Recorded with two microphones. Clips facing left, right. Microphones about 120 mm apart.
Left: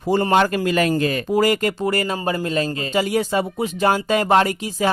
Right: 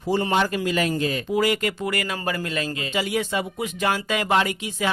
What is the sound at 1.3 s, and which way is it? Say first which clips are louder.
Speech: left 4 dB; 40° left (ahead or behind).